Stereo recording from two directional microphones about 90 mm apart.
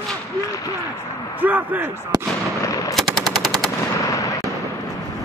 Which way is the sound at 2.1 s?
45° right (ahead or behind).